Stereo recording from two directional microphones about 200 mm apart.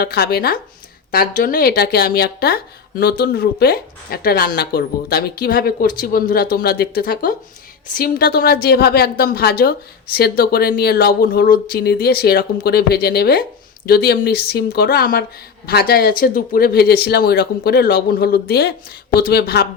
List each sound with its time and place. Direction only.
0.0 s a woman's voice: 50° left (ahead or behind)